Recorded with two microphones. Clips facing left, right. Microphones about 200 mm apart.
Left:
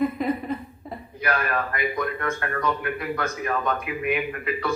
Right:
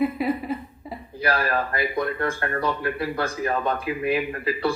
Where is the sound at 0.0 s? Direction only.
5° right (ahead or behind).